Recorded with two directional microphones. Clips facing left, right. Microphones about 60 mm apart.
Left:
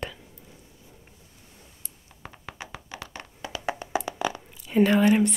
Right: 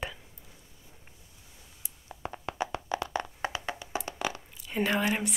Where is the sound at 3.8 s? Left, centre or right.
Left.